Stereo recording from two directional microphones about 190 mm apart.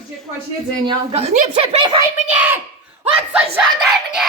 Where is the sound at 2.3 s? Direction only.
10° right (ahead or behind).